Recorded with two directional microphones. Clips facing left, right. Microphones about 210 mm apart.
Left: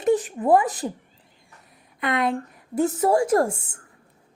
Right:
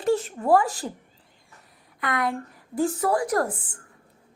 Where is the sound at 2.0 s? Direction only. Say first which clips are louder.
Left 3 dB; 20° left (ahead or behind).